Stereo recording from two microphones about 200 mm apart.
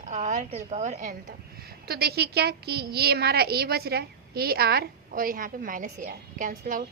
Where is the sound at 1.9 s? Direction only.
50° right (ahead or behind).